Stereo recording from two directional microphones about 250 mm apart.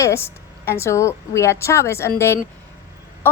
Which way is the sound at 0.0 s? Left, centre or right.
Centre.